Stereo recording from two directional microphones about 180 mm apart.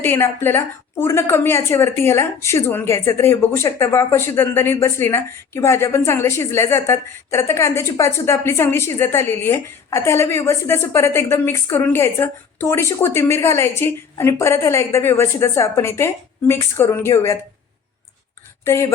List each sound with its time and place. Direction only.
0.0 s a woman's voice: 15° left (ahead or behind)
18.6 s a woman's voice: 15° left (ahead or behind)